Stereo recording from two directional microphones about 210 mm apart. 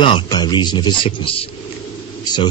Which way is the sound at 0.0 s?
20° left (ahead or behind).